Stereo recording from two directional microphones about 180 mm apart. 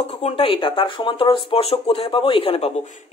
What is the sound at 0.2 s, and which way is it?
Speech, 30° left (ahead or behind).